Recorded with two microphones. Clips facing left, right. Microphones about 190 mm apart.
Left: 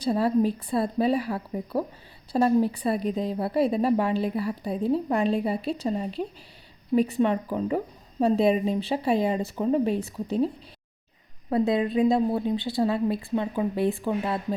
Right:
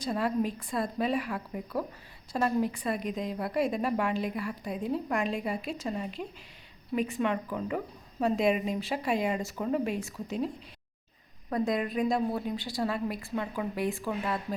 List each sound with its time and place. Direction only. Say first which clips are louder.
0.0 s a woman's voice: left 7 dB; 30° left (ahead or behind)